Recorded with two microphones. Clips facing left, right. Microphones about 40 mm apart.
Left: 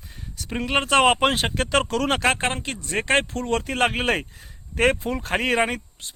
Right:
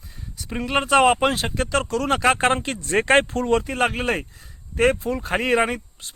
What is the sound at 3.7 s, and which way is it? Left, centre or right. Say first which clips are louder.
Speech: even; centre.